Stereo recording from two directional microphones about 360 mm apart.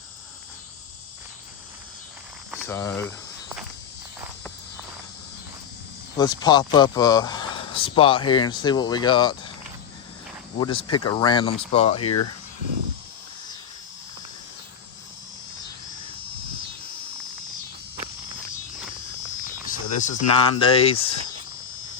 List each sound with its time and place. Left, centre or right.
2.5 s speech: centre
6.1 s speech: centre
10.6 s speech: centre
11.9 s speech: left
19.5 s speech: left